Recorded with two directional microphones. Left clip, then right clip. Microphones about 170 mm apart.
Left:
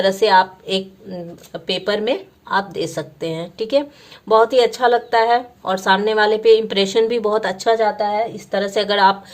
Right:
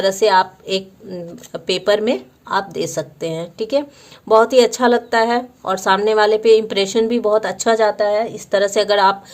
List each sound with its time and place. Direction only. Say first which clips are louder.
0.0 s a woman's voice: even; 30° right (ahead or behind)
7.5 s a woman's voice: right 1 dB; 35° right (ahead or behind)